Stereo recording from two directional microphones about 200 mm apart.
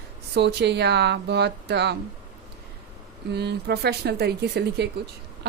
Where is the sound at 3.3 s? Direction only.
55° right (ahead or behind).